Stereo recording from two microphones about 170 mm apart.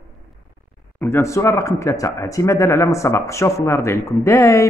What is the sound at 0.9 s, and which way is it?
Speech, 15° left (ahead or behind).